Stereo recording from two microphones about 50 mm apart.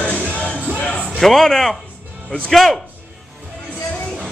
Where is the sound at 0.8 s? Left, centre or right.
Left.